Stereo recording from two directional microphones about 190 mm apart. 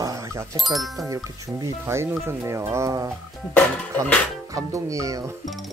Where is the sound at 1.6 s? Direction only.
15° right (ahead or behind).